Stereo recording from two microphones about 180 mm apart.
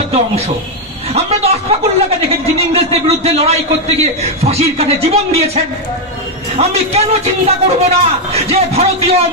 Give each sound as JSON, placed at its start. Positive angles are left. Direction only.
{"t": 1.1, "sound": "speech", "side_deg": -35}